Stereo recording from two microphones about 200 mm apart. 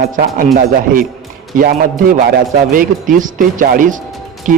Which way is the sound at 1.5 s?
45° right (ahead or behind).